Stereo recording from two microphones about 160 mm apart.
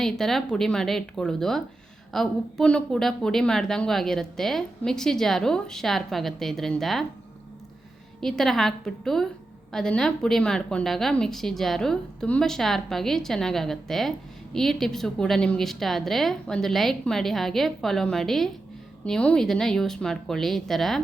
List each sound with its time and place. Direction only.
0.0 s speech: centre (ahead or behind)
8.2 s speech: centre (ahead or behind)